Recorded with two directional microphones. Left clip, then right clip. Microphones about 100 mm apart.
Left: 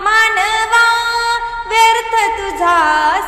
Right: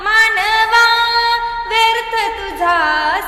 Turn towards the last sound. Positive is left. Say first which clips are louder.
# left 3 dB
turn(degrees=30)  # may be behind; listen again after turning